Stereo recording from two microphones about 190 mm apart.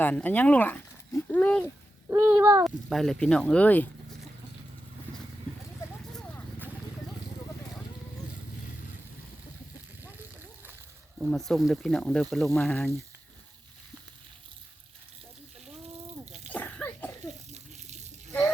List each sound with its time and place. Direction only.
0.0 s speech: 10° left (ahead or behind)
2.0 s speech: 15° right (ahead or behind)
2.6 s speech: centre (ahead or behind)
11.2 s speech: centre (ahead or behind)
16.2 s sneeze: 35° right (ahead or behind)
16.5 s sneeze: 5° left (ahead or behind)
17.5 s water: 35° right (ahead or behind)